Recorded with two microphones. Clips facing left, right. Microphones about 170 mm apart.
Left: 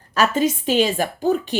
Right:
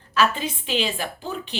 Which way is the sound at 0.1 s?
45° left (ahead or behind).